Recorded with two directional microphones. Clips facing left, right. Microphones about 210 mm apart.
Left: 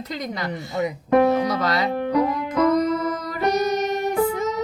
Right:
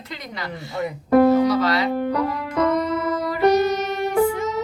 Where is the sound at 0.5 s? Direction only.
20° left (ahead or behind).